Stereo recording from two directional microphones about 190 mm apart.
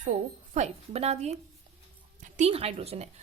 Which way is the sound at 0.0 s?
40° right (ahead or behind).